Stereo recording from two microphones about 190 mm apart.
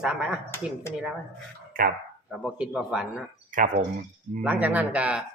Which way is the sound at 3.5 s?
45° right (ahead or behind).